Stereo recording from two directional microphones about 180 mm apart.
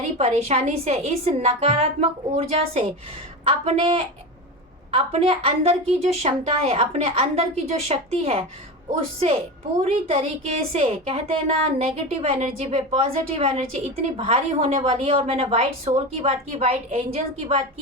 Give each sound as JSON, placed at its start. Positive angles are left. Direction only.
{"t": 0.2, "sound": "a woman's voice", "side_deg": -35}